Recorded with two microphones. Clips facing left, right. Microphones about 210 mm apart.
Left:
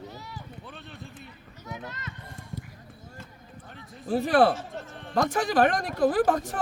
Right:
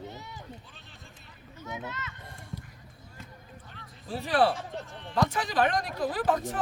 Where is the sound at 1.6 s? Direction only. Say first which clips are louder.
Right 1 dB; 35° left (ahead or behind).